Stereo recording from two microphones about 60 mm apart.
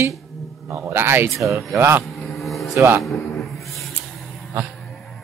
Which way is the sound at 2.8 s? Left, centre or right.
Right.